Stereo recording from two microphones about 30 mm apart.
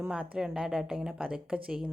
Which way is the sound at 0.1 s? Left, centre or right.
Right.